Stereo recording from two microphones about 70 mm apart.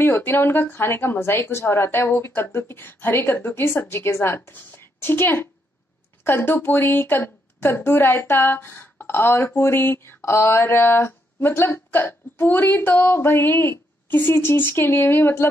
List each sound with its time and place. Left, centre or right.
0.0 s a woman's voice: left